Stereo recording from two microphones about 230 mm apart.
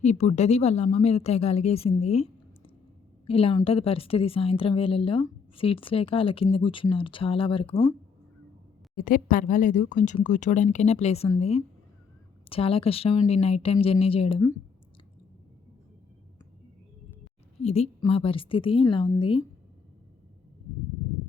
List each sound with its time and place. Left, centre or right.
0.0 s a woman's voice: left
9.0 s a woman's voice: left
17.6 s a woman's voice: left